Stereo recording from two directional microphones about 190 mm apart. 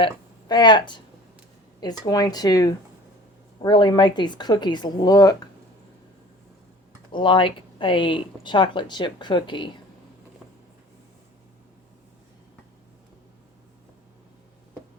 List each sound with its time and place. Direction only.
0.0 s speech: 25° left (ahead or behind)
7.1 s speech: 25° left (ahead or behind)